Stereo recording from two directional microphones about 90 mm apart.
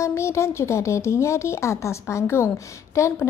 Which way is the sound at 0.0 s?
30° left (ahead or behind).